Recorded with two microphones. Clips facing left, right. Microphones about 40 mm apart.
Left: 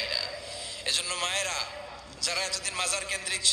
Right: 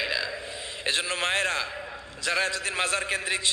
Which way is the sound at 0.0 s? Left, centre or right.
Right.